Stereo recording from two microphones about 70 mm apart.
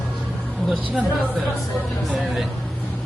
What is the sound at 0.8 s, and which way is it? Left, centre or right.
Speech, right.